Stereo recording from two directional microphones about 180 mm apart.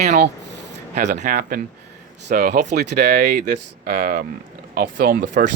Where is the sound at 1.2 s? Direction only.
50° right (ahead or behind).